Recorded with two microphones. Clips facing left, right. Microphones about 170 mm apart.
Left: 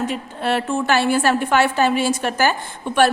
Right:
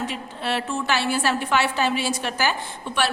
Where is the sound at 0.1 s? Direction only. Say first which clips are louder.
Left 5 dB; 50° left (ahead or behind).